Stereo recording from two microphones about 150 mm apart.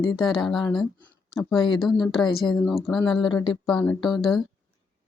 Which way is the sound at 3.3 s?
35° left (ahead or behind).